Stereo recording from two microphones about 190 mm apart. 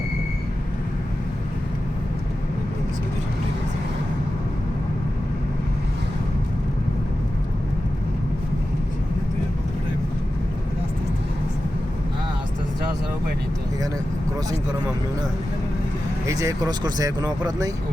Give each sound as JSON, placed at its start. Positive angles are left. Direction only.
{"t": 16.2, "sound": "speech", "side_deg": -15}